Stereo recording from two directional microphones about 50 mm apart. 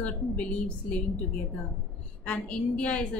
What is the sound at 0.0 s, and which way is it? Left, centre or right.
A woman's voice, left.